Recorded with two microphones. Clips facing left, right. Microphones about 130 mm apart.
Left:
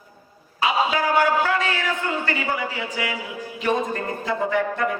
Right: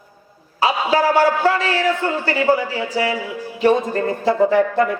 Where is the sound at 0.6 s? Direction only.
35° right (ahead or behind).